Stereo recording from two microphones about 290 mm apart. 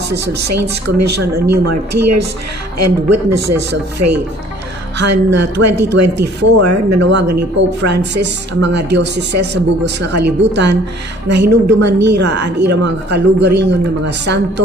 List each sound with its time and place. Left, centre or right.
0.1 s chopping: right
7.0 s a woman's voice: right
7.3 s speech: right
8.0 s a woman's voice: right
11.3 s speech: right
11.8 s a woman's voice: right